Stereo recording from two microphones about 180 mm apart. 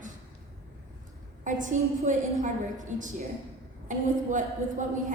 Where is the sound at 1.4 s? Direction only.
45° right (ahead or behind).